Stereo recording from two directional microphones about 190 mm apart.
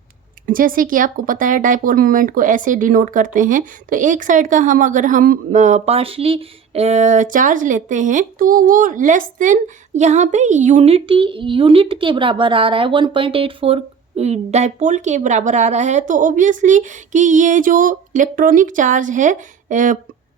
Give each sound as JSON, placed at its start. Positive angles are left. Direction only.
{"t": 0.4, "sound": "speech", "side_deg": -45}